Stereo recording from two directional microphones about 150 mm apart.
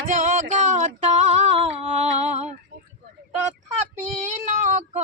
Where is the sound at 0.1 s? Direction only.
55° right (ahead or behind).